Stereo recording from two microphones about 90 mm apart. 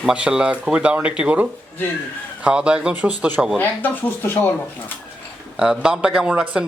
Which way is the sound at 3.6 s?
20° left (ahead or behind).